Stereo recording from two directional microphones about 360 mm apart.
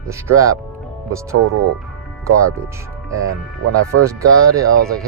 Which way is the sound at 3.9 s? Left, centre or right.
Right.